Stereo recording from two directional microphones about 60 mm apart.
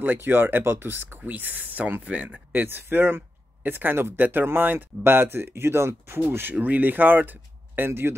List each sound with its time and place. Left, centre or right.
0.0 s speech: right
2.5 s speech: right
6.5 s speech: right